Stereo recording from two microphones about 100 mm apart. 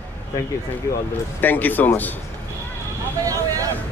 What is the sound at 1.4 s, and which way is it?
Speech, 15° left (ahead or behind).